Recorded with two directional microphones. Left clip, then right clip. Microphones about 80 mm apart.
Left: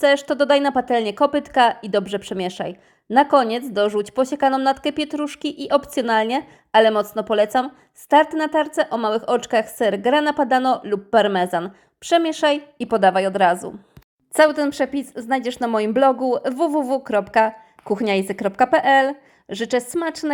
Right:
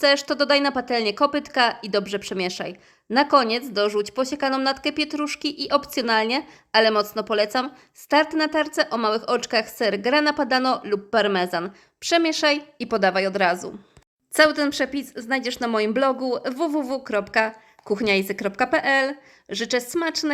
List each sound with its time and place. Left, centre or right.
0.0 s speech: left
11.3 s a woman's voice: left; by 13.6 s centre
14.3 s speech: left